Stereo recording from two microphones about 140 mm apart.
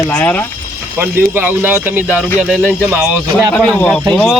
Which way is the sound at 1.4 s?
10° right (ahead or behind).